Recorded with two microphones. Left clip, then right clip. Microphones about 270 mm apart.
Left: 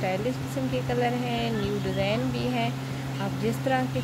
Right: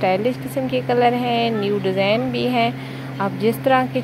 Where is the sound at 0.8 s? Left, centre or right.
Right.